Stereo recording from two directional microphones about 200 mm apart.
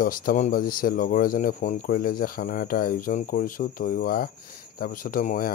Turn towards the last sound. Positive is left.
turn(degrees=45)  # may be behind; listen again after turning